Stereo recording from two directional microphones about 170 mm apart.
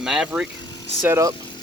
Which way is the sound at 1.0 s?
15° right (ahead or behind).